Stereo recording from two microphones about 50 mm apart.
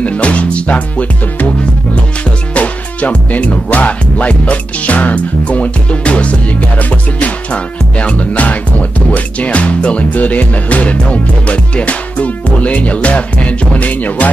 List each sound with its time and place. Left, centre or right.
0.0 s music: left
2.5 s music: left